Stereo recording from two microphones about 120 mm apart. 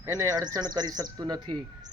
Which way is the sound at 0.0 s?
30° right (ahead or behind).